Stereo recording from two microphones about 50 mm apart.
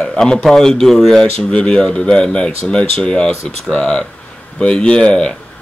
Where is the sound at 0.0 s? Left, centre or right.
Centre.